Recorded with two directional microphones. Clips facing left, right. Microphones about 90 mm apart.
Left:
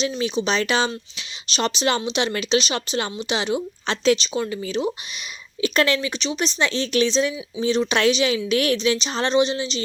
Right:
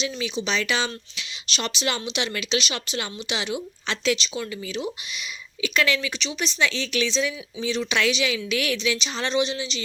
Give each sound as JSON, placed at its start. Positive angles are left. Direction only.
{"t": 0.0, "sound": "speech", "side_deg": 40}